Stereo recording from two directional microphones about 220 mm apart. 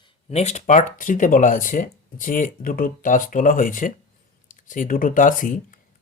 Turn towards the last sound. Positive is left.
turn(degrees=35)  # may be behind; listen again after turning